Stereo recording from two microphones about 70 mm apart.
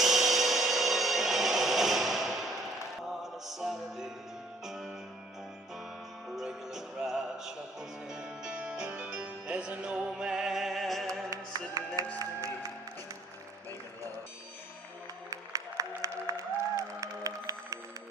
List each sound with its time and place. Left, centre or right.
0.0 s music: centre
6.3 s music: centre
11.3 s music: right
12.2 s music: right
15.3 s music: right